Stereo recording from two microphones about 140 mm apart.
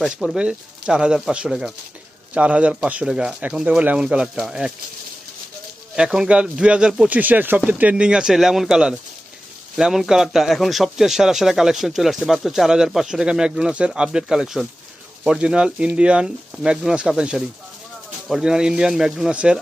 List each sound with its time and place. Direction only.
0.0 s speech: 5° right (ahead or behind)
6.0 s speech: 5° right (ahead or behind)